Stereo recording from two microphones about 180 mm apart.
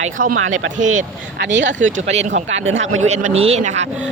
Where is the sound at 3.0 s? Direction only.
40° right (ahead or behind).